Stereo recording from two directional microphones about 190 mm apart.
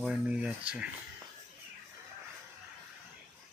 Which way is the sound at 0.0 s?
5° right (ahead or behind).